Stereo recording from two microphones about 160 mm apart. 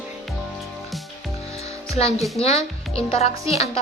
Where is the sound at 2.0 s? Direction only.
40° left (ahead or behind).